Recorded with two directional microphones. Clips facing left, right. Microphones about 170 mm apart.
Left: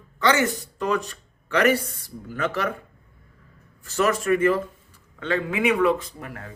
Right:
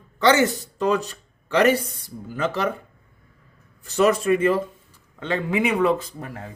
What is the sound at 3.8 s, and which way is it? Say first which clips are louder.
Speech: right 4 dB; 20° right (ahead or behind).